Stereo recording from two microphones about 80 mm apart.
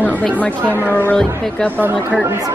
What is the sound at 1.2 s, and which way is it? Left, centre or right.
Speech, centre.